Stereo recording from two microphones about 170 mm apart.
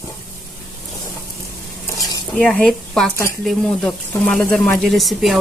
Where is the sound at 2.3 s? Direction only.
5° left (ahead or behind).